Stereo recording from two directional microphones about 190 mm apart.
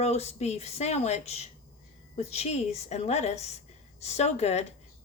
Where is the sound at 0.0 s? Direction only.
35° left (ahead or behind).